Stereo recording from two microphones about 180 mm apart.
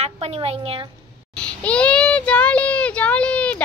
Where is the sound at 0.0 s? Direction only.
35° right (ahead or behind).